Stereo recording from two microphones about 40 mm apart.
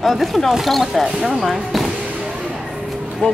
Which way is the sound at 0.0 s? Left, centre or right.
Centre.